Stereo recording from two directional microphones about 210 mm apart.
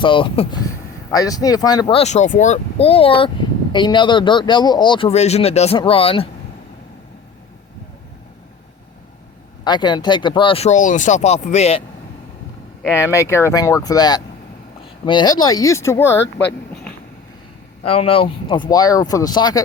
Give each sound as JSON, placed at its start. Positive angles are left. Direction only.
{"t": 0.0, "sound": "speech", "side_deg": 25}
{"t": 9.6, "sound": "speech", "side_deg": 20}
{"t": 12.9, "sound": "speech", "side_deg": 10}
{"t": 17.8, "sound": "speech", "side_deg": 25}